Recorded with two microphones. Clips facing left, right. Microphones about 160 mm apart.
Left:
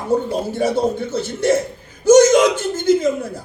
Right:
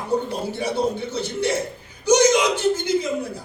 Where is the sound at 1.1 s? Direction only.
50° left (ahead or behind).